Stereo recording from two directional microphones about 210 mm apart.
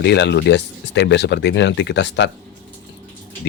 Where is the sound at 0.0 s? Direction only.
55° left (ahead or behind).